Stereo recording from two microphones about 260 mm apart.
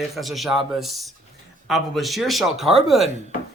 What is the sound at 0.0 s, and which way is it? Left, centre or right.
A man's voice, centre.